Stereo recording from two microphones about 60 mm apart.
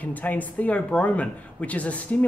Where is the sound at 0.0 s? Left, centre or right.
Left.